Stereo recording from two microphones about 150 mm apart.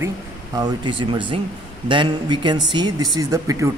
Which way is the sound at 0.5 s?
30° right (ahead or behind).